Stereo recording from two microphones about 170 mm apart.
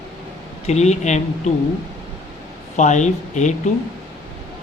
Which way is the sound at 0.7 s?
40° left (ahead or behind).